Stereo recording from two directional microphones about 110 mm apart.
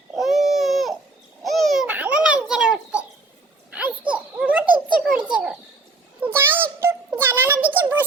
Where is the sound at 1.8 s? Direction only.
10° right (ahead or behind).